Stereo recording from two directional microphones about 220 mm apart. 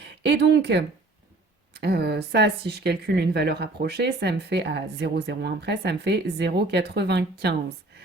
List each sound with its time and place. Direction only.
0.0 s speech: 50° right (ahead or behind)